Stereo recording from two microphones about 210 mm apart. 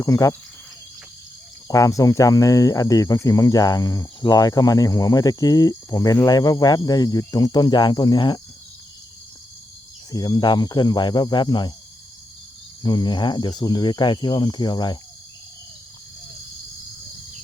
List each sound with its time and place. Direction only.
0.0 s speech: 15° left (ahead or behind)
1.6 s speech: 15° left (ahead or behind)
10.1 s speech: 20° left (ahead or behind)
12.8 s speech: 20° left (ahead or behind)